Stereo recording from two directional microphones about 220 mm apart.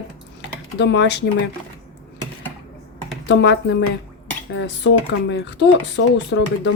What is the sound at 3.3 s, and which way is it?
Speech, 55° left (ahead or behind).